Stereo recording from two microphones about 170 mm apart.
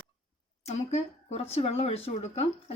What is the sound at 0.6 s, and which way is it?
Speech, 40° left (ahead or behind).